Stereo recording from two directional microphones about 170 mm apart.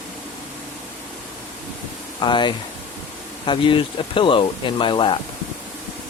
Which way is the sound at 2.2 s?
30° left (ahead or behind).